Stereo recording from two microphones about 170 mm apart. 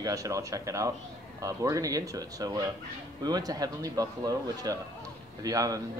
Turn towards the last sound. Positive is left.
turn(degrees=-20)  # may be behind; listen again after turning